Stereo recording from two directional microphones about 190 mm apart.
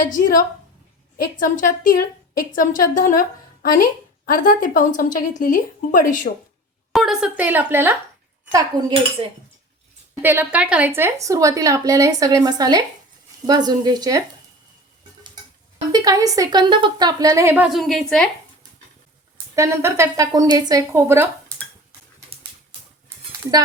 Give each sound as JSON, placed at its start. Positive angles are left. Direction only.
{"t": 0.1, "sound": "a woman's voice", "side_deg": 45}
{"t": 6.9, "sound": "speech", "side_deg": 0}
{"t": 10.2, "sound": "a woman's voice", "side_deg": -10}
{"t": 15.9, "sound": "a woman's voice", "side_deg": -20}
{"t": 19.5, "sound": "speech", "side_deg": -15}